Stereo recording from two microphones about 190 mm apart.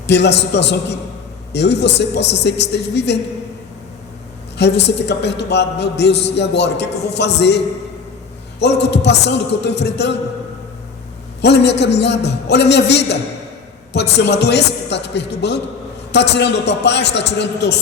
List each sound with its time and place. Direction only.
0.1 s a man's voice: 65° left (ahead or behind)
4.5 s a man's voice: 65° left (ahead or behind)
11.4 s a man's voice: 65° left (ahead or behind)